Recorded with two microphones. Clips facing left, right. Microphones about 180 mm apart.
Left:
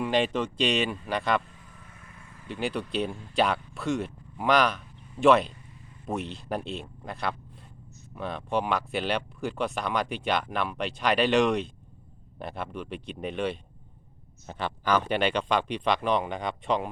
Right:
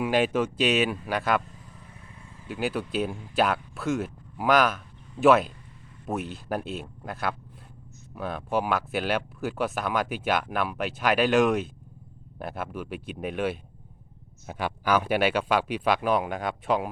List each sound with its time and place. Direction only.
0.0 s speech: 5° right (ahead or behind)
2.0 s vehicle: 20° right (ahead or behind)
2.5 s speech: 5° right (ahead or behind)